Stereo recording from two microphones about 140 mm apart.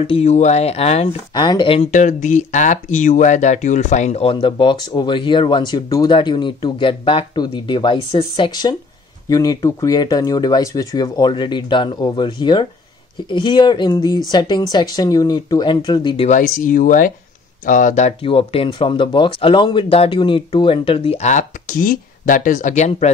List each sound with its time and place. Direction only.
0.0 s speech: 45° left (ahead or behind)
1.3 s speech: 30° left (ahead or behind)
1.9 s speech: 60° left (ahead or behind)
4.2 s speech: 40° left (ahead or behind)
16.3 s speech: 70° left (ahead or behind)
18.2 s speech: 40° left (ahead or behind); by 23.0 s 55° left (ahead or behind)